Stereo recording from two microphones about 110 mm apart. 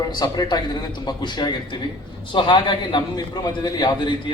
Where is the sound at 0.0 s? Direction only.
40° left (ahead or behind).